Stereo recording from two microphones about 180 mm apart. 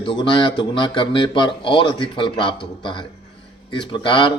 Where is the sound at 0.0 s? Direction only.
30° left (ahead or behind).